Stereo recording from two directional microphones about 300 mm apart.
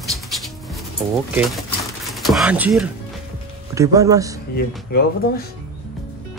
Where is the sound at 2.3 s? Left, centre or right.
Centre.